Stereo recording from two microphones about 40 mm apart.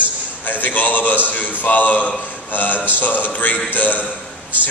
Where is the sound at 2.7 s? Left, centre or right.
Right.